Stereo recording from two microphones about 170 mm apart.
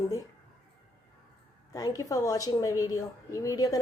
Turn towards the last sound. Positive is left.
turn(degrees=20)  # may be behind; listen again after turning